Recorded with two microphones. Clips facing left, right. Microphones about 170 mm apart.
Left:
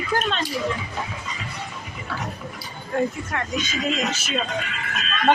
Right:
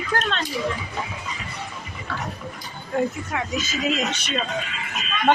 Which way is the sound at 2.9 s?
5° right (ahead or behind).